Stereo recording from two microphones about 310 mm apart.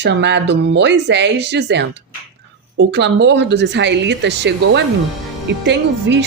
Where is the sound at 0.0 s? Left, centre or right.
Right.